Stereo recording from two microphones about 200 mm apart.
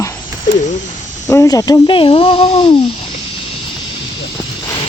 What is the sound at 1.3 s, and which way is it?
Speech, 15° left (ahead or behind).